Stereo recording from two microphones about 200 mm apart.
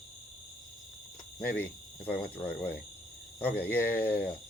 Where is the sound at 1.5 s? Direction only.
10° left (ahead or behind).